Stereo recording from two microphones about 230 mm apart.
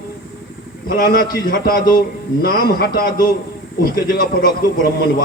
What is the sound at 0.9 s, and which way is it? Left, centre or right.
A man's voice, left.